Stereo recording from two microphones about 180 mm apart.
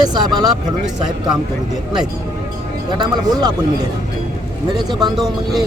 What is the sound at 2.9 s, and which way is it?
Speech, 20° right (ahead or behind).